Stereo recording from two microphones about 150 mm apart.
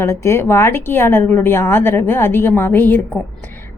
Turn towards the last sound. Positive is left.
turn(degrees=10)  # may be behind; listen again after turning